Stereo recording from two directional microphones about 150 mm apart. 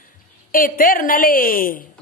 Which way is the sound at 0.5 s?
70° left (ahead or behind).